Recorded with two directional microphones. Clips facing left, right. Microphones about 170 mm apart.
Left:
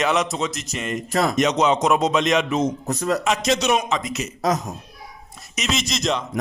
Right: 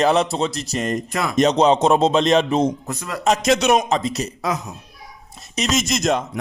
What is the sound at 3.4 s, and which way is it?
Speech, 55° right (ahead or behind).